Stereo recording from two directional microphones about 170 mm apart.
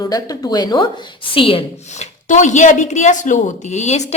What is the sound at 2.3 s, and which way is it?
Speech, 45° left (ahead or behind).